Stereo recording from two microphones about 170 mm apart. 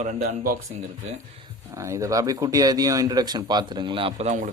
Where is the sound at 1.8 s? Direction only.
20° right (ahead or behind); by 4.5 s 45° right (ahead or behind).